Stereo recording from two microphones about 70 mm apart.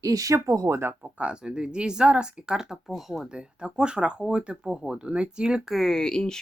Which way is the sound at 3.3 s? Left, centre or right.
Centre.